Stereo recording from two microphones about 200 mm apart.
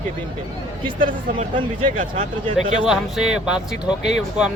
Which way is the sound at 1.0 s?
40° right (ahead or behind).